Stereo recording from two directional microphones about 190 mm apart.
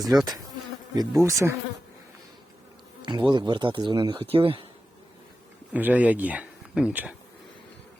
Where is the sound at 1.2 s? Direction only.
15° right (ahead or behind).